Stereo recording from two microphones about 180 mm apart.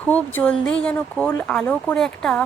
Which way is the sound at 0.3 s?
5° left (ahead or behind).